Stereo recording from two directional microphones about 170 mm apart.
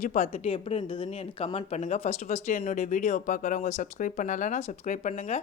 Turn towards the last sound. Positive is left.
turn(degrees=45)  # may be behind; listen again after turning